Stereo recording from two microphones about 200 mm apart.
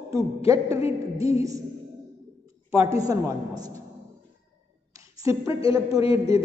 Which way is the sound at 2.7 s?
15° right (ahead or behind).